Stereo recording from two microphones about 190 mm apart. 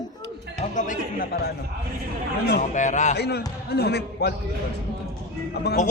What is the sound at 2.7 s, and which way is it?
Speech, 40° left (ahead or behind).